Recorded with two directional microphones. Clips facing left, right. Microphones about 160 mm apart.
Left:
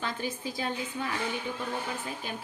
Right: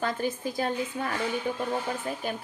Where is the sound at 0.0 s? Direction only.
45° right (ahead or behind).